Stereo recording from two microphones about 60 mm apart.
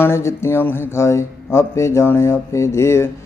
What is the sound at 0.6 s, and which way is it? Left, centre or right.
Speech, left.